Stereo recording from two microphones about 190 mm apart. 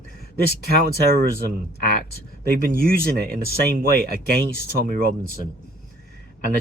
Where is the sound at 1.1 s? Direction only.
50° right (ahead or behind).